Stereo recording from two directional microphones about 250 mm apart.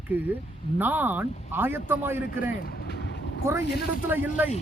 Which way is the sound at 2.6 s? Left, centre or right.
Left.